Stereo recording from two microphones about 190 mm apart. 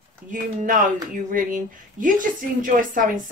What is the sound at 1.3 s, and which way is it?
Speech, 45° right (ahead or behind).